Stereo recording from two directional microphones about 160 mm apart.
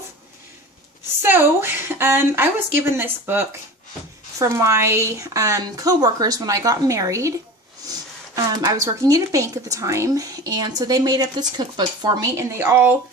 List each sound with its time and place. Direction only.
1.2 s a sound: 15° right (ahead or behind)
2.9 s speech: 15° right (ahead or behind)
8.4 s speech: 25° right (ahead or behind)
12.5 s speech: 15° right (ahead or behind)